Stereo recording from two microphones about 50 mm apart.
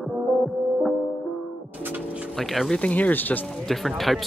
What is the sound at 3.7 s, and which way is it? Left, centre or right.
Speech, centre.